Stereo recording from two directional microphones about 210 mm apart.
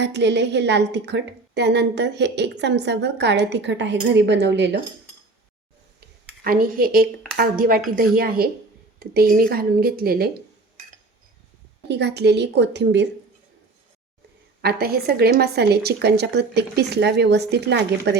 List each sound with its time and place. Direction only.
0.0 s a woman's voice: 55° right (ahead or behind)
6.4 s a woman's voice: 45° right (ahead or behind)
11.9 s a woman's voice: 55° right (ahead or behind)
14.6 s a woman's voice: 50° right (ahead or behind)